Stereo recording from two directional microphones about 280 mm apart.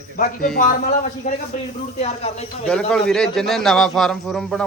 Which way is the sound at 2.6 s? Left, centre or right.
Centre.